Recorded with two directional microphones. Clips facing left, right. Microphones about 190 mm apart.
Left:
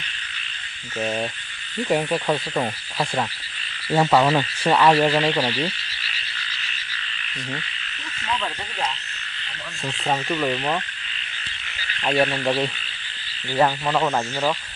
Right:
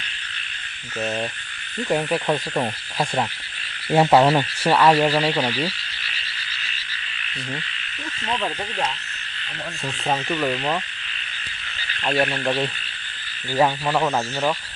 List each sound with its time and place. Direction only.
1.8 s speech: centre (ahead or behind)
3.8 s speech: 25° right (ahead or behind)
4.3 s speech: 5° right (ahead or behind)
5.5 s frog: 10° right (ahead or behind)
10.1 s speech: 5° right (ahead or behind)
12.0 s speech: 5° left (ahead or behind)